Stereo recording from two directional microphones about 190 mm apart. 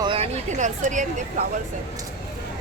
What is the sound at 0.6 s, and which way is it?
Speech, 40° right (ahead or behind).